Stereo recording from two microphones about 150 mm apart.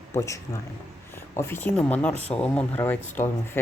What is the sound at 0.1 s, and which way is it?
Speech, 20° left (ahead or behind).